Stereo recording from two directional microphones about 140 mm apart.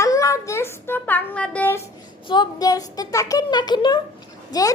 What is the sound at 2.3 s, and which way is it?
A woman's voice, 30° left (ahead or behind).